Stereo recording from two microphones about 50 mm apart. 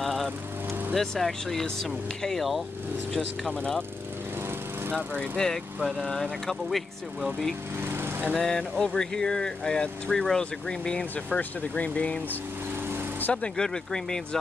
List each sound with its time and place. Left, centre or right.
0.0 s vehicle: centre
0.9 s speech: centre
5.4 s speech: centre
7.8 s lawn mower: right
8.3 s speech: centre
11.3 s speech: left
13.3 s speech: centre